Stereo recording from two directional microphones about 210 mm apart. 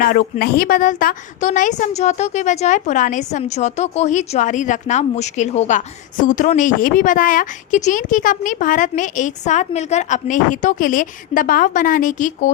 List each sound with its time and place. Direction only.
0.1 s a woman's voice: 45° left (ahead or behind)